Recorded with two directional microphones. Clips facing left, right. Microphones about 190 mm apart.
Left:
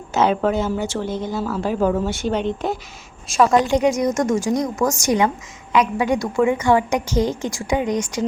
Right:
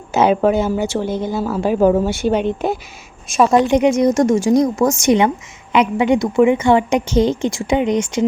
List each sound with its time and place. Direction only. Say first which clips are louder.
0.1 s speech: right 4 dB; 10° right (ahead or behind)
2.0 s speech: right 4 dB; 10° right (ahead or behind)
3.2 s a woman's voice: right 3 dB; 20° right (ahead or behind)